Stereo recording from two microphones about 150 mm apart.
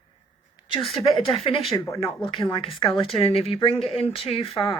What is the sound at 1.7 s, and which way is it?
Speech, 20° left (ahead or behind).